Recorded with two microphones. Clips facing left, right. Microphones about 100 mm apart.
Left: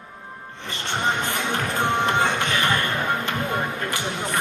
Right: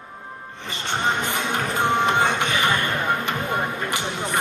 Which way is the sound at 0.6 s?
20° right (ahead or behind).